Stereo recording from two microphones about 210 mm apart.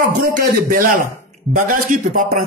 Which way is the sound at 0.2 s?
40° right (ahead or behind).